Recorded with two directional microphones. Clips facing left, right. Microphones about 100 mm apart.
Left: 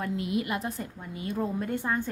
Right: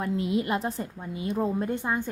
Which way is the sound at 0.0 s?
25° right (ahead or behind).